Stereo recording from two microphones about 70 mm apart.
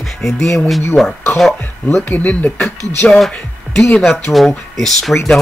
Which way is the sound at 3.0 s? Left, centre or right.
Centre.